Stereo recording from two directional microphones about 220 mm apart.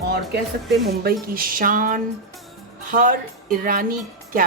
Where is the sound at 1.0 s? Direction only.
40° right (ahead or behind).